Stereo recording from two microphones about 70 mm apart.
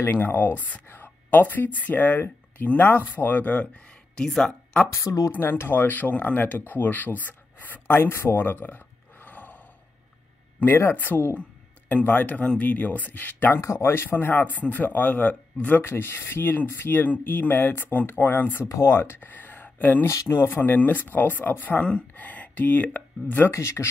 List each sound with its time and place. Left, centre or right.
0.0 s speech: left; by 4.8 s centre
5.0 s speech: left
5.3 s speech: left
10.6 s speech: left
13.6 s speech: left
18.7 s speech: left
20.1 s speech: left
23.5 s speech: left